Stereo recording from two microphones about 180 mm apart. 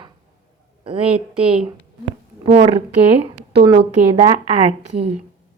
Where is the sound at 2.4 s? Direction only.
30° right (ahead or behind).